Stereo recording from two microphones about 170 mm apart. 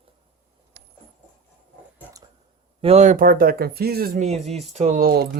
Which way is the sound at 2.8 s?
40° right (ahead or behind).